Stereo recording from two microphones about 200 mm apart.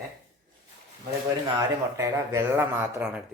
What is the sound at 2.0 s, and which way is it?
Speech, 15° right (ahead or behind).